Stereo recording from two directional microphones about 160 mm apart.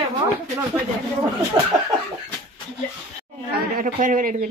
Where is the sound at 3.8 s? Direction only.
55° right (ahead or behind).